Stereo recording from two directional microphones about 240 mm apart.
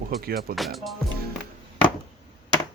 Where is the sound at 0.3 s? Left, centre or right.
Right.